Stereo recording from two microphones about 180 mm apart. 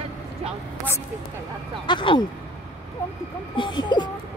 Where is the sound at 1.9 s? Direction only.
25° left (ahead or behind).